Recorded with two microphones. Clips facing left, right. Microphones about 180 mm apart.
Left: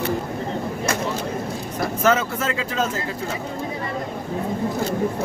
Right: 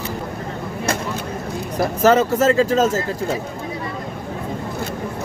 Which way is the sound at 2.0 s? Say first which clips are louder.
Right 7 dB; 40° right (ahead or behind).